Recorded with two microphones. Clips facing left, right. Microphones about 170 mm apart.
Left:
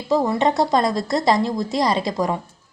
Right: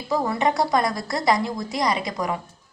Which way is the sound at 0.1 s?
25° left (ahead or behind).